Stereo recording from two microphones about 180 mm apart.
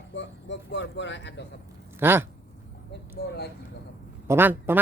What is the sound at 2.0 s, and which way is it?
Speech, 10° right (ahead or behind).